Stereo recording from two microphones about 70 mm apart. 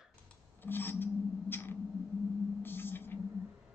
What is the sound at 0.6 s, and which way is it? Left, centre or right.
Filing, left.